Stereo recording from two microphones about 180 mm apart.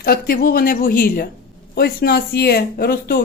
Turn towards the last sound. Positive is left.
turn(degrees=60)  # may be behind; listen again after turning